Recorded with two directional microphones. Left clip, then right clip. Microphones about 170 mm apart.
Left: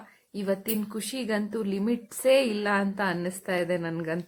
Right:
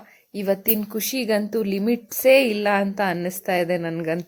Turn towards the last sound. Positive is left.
turn(degrees=-15)  # may be behind; listen again after turning